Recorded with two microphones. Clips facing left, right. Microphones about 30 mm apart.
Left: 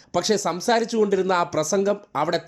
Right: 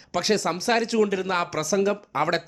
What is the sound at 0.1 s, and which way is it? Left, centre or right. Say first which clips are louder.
Speech: left 2 dB; right.